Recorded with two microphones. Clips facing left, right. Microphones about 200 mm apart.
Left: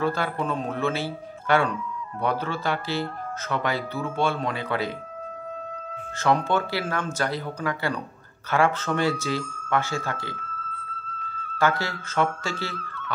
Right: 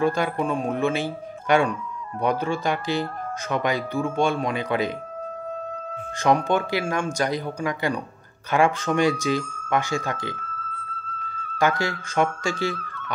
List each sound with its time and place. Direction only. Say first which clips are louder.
0.0 s speech: right 3 dB; 15° right (ahead or behind)
6.1 s speech: right 2 dB; 15° right (ahead or behind)
11.8 s speech: right 2 dB; 15° right (ahead or behind)
12.7 s speech: even; 45° right (ahead or behind)